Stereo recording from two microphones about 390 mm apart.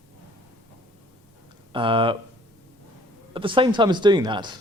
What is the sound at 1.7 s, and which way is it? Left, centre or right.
Speech, centre.